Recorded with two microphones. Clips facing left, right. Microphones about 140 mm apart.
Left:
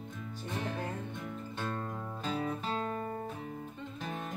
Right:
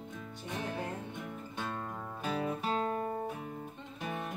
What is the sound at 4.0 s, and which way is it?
Music, 10° right (ahead or behind).